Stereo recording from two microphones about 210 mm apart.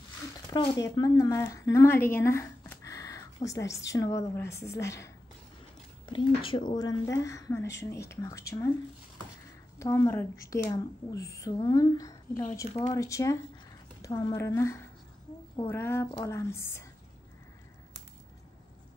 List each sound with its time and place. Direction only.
0.5 s a woman's voice: 20° left (ahead or behind)
6.0 s a woman's voice: 25° left (ahead or behind)
9.8 s a woman's voice: 10° left (ahead or behind)